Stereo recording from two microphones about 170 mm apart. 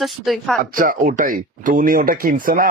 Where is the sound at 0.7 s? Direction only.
55° right (ahead or behind).